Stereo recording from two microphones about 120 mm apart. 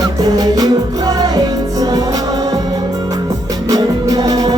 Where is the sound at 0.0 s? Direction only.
30° right (ahead or behind).